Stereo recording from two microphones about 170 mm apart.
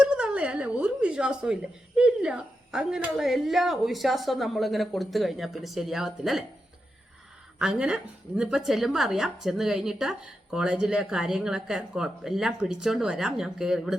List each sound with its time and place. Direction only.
0.0 s a sound: 5° right (ahead or behind)
2.0 s a woman's voice: 5° right (ahead or behind)
7.6 s a woman's voice: 5° right (ahead or behind)